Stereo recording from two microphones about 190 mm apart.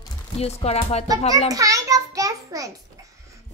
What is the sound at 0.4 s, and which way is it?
Speech, 35° left (ahead or behind).